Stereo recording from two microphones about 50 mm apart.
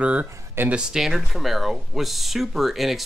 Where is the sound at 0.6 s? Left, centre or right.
Right.